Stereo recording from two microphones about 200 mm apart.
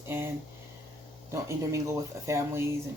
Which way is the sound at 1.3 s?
15° right (ahead or behind).